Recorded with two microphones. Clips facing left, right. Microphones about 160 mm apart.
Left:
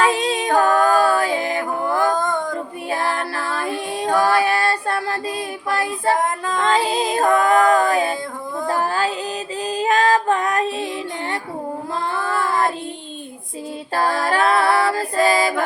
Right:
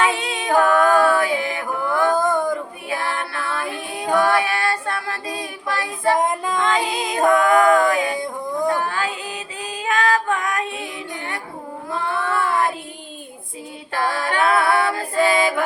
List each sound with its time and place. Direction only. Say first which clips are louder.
0.0 s music: left 3 dB; 35° left (ahead or behind)
2.1 s female singing: right 3 dB; 10° right (ahead or behind)
2.9 s music: left 3 dB; 35° left (ahead or behind)
4.2 s female singing: left 2 dB; 30° left (ahead or behind)
6.1 s music: right 1 dB; 15° right (ahead or behind)
6.6 s music: left 5 dB; 35° left (ahead or behind)
7.3 s a capella: right 1 dB; 35° left (ahead or behind)
8.6 s a sound: left 2 dB; 30° left (ahead or behind)
9.6 s music: left 3 dB; 35° left (ahead or behind)
11.9 s child singing: right 1 dB; 35° left (ahead or behind)
13.9 s music: left 3 dB; 35° left (ahead or behind)